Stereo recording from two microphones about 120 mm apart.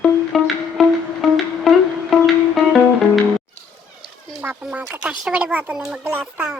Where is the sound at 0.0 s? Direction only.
Centre (ahead or behind).